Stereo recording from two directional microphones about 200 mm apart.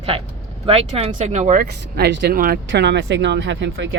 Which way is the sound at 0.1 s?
30° right (ahead or behind).